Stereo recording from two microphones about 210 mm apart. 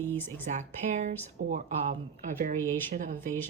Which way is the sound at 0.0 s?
10° left (ahead or behind).